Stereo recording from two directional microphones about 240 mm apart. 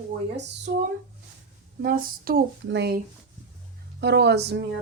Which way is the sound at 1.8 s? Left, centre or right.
Right.